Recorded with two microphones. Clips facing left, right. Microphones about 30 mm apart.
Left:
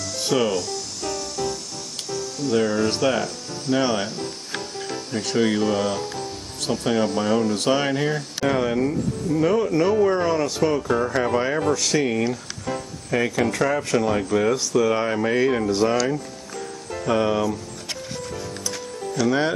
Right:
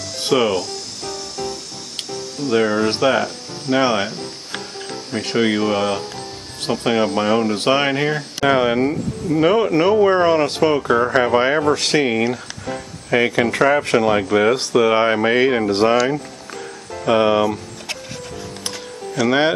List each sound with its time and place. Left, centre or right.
0.2 s speech: right
2.0 s speech: right
17.0 s speech: right
19.1 s speech: right